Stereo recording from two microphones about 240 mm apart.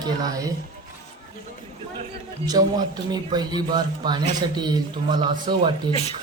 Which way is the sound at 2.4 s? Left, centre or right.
Centre.